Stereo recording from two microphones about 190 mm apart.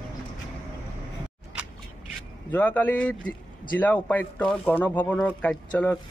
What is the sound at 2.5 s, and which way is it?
Speech, 10° left (ahead or behind).